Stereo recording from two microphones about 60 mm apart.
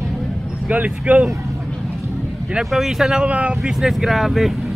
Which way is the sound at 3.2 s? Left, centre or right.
Right.